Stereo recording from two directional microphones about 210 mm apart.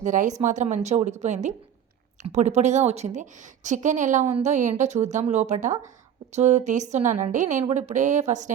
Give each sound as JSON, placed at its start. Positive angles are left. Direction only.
{"t": 0.0, "sound": "a woman's voice", "side_deg": -35}